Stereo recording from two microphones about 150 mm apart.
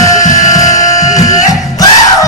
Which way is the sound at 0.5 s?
25° left (ahead or behind).